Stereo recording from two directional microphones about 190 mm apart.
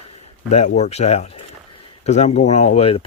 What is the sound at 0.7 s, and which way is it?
Speech, 35° left (ahead or behind).